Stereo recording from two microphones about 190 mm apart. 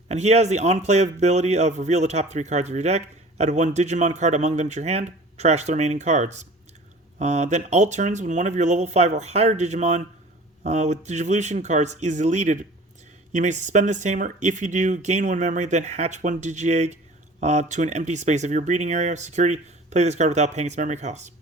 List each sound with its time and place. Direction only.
0.1 s speech: 35° right (ahead or behind)